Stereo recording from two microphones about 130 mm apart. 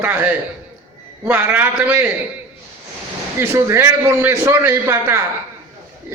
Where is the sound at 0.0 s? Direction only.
10° right (ahead or behind).